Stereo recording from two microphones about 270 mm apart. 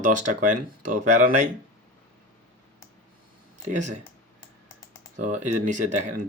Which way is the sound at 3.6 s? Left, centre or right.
Right.